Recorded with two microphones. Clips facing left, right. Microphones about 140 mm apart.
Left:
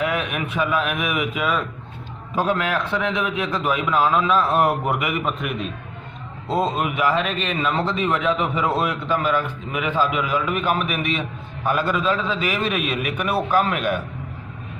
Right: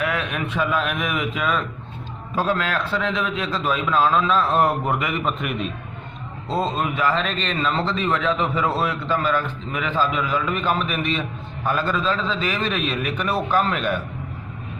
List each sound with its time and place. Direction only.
0.0 s a man's voice: 15° left (ahead or behind)
5.4 s a man's voice: centre (ahead or behind)
6.5 s a man's voice: 15° left (ahead or behind)